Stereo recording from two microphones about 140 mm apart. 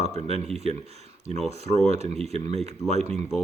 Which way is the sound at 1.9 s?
50° right (ahead or behind).